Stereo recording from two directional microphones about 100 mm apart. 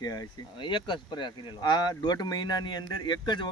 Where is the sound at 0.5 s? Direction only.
55° left (ahead or behind).